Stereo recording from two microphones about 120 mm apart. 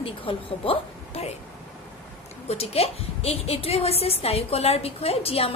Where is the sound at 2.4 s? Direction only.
60° left (ahead or behind).